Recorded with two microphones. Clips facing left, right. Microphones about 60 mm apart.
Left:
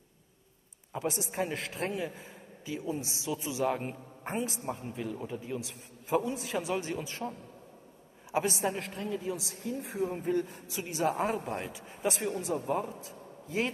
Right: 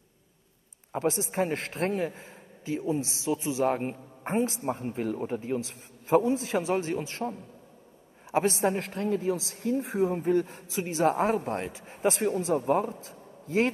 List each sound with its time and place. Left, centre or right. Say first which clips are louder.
0.9 s a man's voice: right 5 dB; right
4.6 s a man's voice: right 6 dB; right
8.6 s a man's voice: right 6 dB; right
10.1 s a man's voice: right 5 dB; right
11.1 s a man's voice: right 5 dB; right
13.0 s a sound: right 1 dB; right